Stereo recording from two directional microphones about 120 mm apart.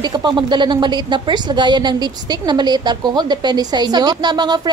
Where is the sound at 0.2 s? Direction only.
40° right (ahead or behind).